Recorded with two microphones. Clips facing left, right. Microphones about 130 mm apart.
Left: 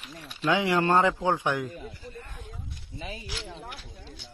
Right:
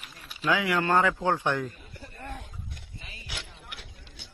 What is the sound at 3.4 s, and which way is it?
Speech, 75° left (ahead or behind).